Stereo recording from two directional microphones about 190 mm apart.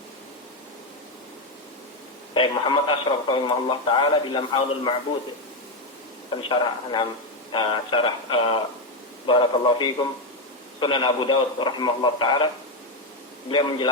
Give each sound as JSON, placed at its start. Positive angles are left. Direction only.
{"t": 2.3, "sound": "speech", "side_deg": 25}
{"t": 6.5, "sound": "speech", "side_deg": 25}
{"t": 13.5, "sound": "speech", "side_deg": 25}